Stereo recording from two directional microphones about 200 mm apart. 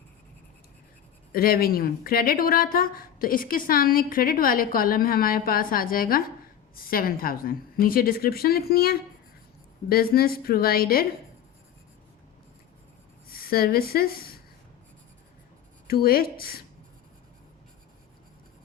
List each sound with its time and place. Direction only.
1.3 s speech: 45° left (ahead or behind)
13.3 s speech: 50° left (ahead or behind)
15.9 s speech: 50° left (ahead or behind)